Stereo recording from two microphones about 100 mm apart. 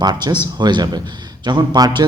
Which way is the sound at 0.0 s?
45° right (ahead or behind).